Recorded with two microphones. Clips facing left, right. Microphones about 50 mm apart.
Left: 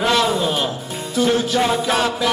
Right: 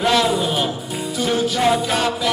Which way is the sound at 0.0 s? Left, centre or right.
Centre.